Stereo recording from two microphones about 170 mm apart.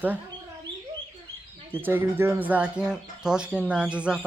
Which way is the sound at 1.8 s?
10° right (ahead or behind).